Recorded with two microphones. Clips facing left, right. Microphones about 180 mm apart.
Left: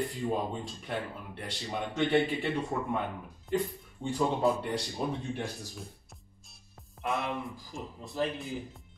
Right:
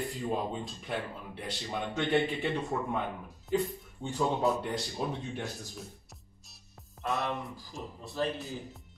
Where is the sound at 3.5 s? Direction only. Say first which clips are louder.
Right 1 dB; centre (ahead or behind).